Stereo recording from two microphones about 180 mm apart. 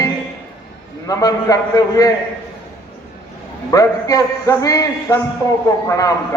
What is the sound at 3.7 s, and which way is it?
A man's voice, 20° left (ahead or behind).